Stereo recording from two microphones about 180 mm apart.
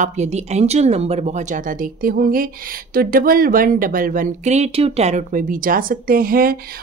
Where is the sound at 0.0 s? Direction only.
40° right (ahead or behind).